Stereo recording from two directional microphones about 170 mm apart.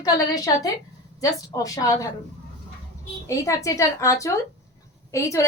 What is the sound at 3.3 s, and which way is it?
A woman's voice, 20° left (ahead or behind).